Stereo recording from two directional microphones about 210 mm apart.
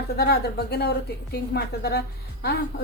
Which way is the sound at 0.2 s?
50° left (ahead or behind).